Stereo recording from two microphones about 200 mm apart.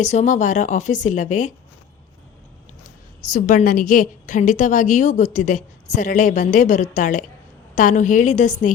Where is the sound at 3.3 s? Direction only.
40° left (ahead or behind).